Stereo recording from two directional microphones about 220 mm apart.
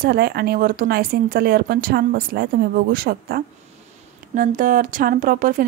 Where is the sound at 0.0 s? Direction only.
45° right (ahead or behind).